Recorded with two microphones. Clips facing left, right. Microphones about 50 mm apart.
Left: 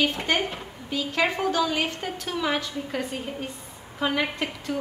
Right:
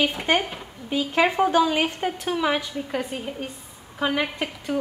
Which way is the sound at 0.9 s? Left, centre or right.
Centre.